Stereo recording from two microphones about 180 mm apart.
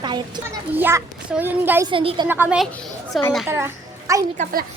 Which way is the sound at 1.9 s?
30° right (ahead or behind).